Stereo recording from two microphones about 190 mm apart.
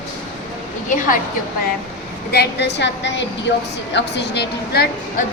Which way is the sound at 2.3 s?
60° left (ahead or behind).